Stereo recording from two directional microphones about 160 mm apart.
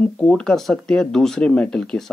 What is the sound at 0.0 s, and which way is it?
Speech, 5° left (ahead or behind).